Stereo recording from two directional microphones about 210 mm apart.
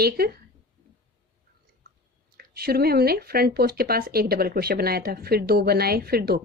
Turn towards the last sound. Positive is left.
turn(degrees=-50)  # may be behind; listen again after turning